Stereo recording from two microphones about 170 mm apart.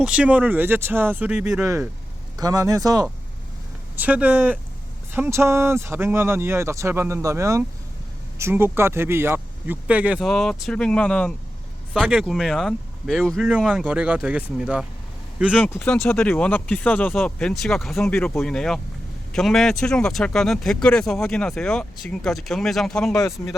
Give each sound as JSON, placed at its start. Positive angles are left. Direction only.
{"t": 0.0, "sound": "speech", "side_deg": -5}
{"t": 1.6, "sound": "a man's voice", "side_deg": -15}
{"t": 3.9, "sound": "speech", "side_deg": -10}
{"t": 15.6, "sound": "speech", "side_deg": 5}